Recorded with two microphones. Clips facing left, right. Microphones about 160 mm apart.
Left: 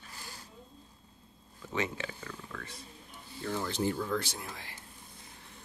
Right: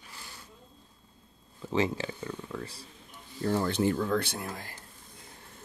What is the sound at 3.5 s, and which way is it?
Speech, 60° right (ahead or behind).